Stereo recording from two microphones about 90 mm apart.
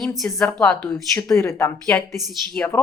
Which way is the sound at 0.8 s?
35° left (ahead or behind).